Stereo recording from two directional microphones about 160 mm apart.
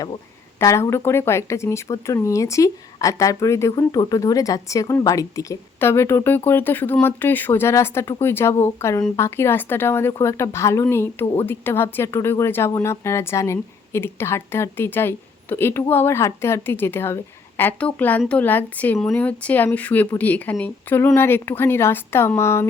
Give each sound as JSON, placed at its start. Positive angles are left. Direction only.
{"t": 0.6, "sound": "a woman's voice", "side_deg": 15}